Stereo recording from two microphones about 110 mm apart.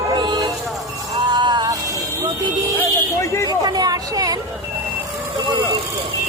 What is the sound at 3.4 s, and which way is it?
Speech, 35° right (ahead or behind).